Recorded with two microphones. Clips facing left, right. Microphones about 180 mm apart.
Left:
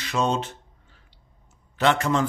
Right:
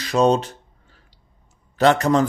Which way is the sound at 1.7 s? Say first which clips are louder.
Right 5 dB; 40° right (ahead or behind).